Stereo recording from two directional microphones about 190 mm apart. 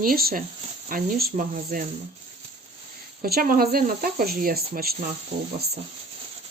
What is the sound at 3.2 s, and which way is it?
Speech, 50° right (ahead or behind).